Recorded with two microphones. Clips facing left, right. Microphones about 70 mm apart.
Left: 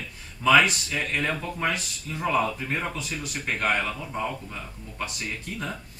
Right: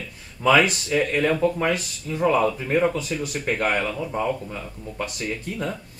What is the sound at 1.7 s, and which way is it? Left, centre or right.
Speech, centre.